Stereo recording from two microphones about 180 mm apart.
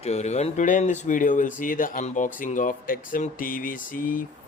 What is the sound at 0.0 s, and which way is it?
Speech, 40° left (ahead or behind).